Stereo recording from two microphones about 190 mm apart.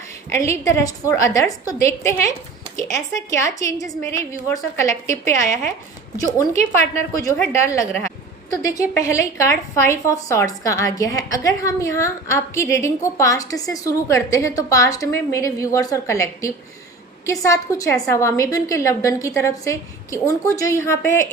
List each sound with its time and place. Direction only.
0.3 s a woman's voice: 15° left (ahead or behind)